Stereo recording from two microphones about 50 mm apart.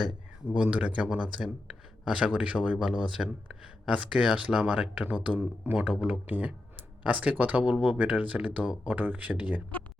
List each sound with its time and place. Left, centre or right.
0.5 s speech: right
5.1 s speech: right